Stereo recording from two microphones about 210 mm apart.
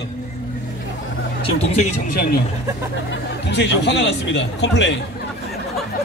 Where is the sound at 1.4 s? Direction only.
30° left (ahead or behind).